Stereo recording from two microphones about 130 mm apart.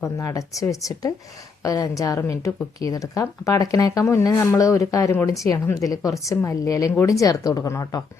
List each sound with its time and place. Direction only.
0.0 s a woman's voice: 25° left (ahead or behind)